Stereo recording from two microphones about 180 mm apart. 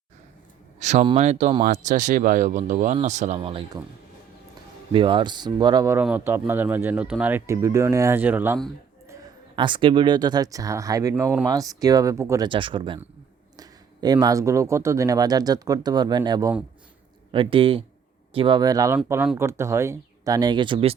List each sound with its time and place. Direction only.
0.8 s speech: 40° right (ahead or behind)
4.9 s speech: 30° right (ahead or behind); by 8.5 s 10° right (ahead or behind)
9.6 s speech: 25° right (ahead or behind)
12.5 s speech: 30° right (ahead or behind)